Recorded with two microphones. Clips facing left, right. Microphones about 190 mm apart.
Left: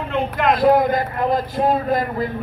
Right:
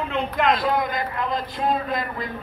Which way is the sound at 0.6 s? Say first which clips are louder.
Left 8 dB; 50° left (ahead or behind).